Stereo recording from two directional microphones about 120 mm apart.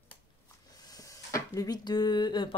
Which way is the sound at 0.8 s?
30° left (ahead or behind).